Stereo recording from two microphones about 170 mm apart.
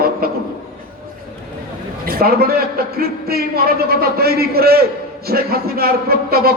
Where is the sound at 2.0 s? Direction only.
60° right (ahead or behind).